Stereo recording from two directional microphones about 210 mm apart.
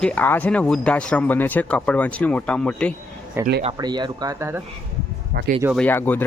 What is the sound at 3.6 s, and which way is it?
Speech, 25° right (ahead or behind).